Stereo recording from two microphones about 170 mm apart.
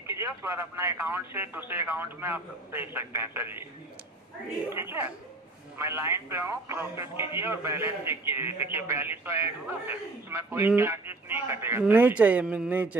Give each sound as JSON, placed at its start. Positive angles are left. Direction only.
{"t": 0.1, "sound": "speech", "side_deg": -15}
{"t": 4.6, "sound": "speech", "side_deg": -15}